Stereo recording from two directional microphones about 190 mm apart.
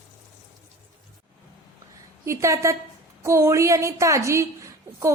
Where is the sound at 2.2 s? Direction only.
15° right (ahead or behind).